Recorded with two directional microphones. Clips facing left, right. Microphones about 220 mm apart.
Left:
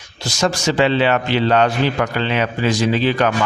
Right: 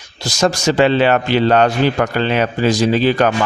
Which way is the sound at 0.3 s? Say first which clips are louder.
Right 3 dB; 40° right (ahead or behind).